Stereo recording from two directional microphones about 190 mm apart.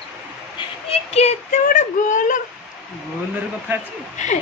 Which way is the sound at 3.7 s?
10° right (ahead or behind).